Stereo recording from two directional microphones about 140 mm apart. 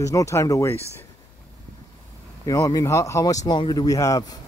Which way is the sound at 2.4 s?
25° left (ahead or behind).